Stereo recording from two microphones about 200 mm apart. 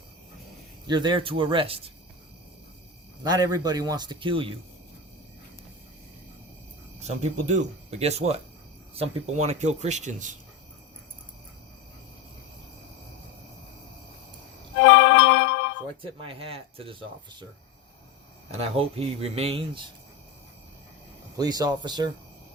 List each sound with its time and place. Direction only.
0.9 s a man's voice: 20° right (ahead or behind)
3.2 s a man's voice: 20° right (ahead or behind)
7.0 s speech: 35° right (ahead or behind)
14.8 s music: 65° left (ahead or behind)
16.0 s a man's voice: 25° right (ahead or behind)
18.6 s a man's voice: 30° right (ahead or behind)
21.3 s a man's voice: 20° right (ahead or behind)